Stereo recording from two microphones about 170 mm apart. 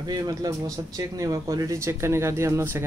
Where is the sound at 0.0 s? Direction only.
20° right (ahead or behind).